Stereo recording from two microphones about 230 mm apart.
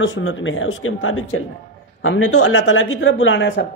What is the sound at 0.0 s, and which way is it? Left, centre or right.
A man's voice, left.